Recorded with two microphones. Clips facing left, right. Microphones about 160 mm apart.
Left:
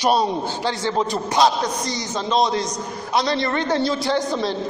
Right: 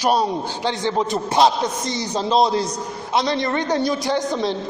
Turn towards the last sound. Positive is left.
turn(degrees=-20)  # may be behind; listen again after turning